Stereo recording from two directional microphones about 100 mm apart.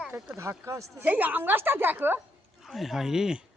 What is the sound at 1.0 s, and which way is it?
A woman's voice, 15° right (ahead or behind).